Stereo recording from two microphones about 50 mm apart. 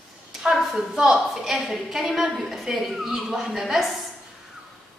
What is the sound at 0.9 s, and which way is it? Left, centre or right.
Speech, centre.